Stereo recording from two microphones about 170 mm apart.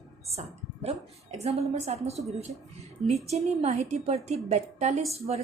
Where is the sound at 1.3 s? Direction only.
40° right (ahead or behind).